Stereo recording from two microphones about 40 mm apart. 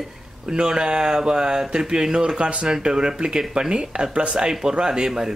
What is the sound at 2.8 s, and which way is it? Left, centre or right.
Speech, centre.